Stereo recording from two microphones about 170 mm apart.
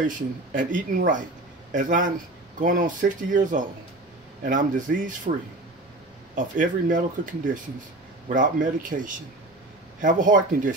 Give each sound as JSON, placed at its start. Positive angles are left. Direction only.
{"t": 0.0, "sound": "speech", "side_deg": -50}
{"t": 6.3, "sound": "speech", "side_deg": -50}
{"t": 8.3, "sound": "speech", "side_deg": -50}